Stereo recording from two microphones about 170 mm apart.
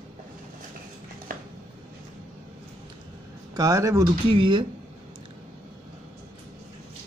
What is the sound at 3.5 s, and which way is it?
Speech, 20° right (ahead or behind).